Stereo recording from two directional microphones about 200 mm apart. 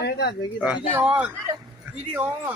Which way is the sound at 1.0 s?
5° right (ahead or behind).